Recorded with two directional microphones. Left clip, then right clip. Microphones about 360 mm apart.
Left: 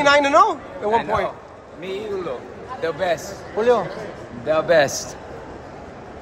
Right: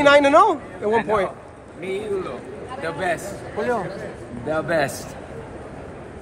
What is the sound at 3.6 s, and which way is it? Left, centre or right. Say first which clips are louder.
A man's voice: left 6 dB; left.